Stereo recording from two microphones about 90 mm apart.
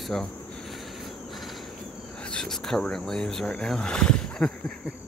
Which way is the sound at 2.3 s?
5° left (ahead or behind).